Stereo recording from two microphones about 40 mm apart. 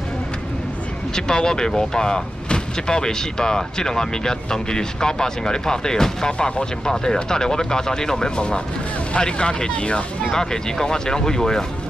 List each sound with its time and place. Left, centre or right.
1.1 s speech: centre